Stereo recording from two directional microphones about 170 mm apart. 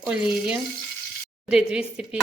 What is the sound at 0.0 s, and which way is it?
Speech, 5° right (ahead or behind).